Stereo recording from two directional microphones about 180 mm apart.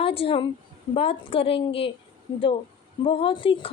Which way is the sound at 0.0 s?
30° left (ahead or behind).